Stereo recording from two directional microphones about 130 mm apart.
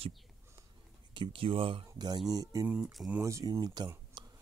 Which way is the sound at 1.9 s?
30° right (ahead or behind).